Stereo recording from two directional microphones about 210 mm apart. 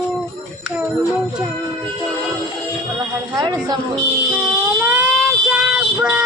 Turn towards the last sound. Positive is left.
turn(degrees=-5)  # may be behind; listen again after turning